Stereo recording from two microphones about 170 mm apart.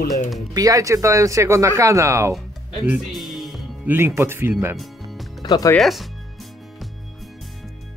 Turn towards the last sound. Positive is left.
turn(degrees=0)  # may be behind; listen again after turning